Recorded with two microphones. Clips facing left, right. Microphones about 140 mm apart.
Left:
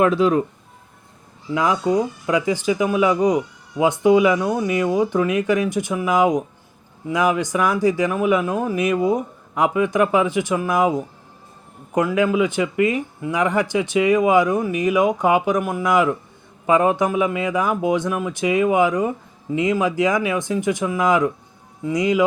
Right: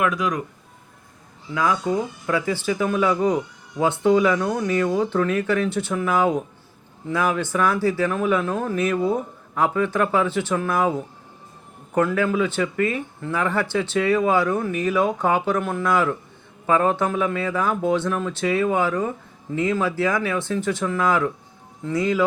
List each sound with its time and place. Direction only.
0.0 s speech: 30° left (ahead or behind)
1.5 s speech: 20° left (ahead or behind)